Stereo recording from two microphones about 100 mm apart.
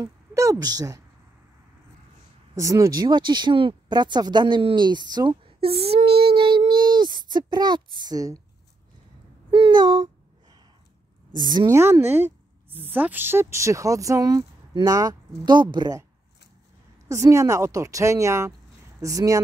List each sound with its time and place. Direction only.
0.0 s a woman's voice: 30° right (ahead or behind)
2.5 s speech: 30° right (ahead or behind); by 5.4 s 45° right (ahead or behind)
5.4 s child singing: 70° right (ahead or behind); by 8.4 s 40° right (ahead or behind)
9.5 s a sound: 65° right (ahead or behind)
9.8 s a sound: 50° right (ahead or behind)
11.3 s speech: 45° right (ahead or behind)
11.7 s a woman's voice: 25° right (ahead or behind)
15.4 s speech: 50° right (ahead or behind)
17.1 s a woman's voice: 30° right (ahead or behind)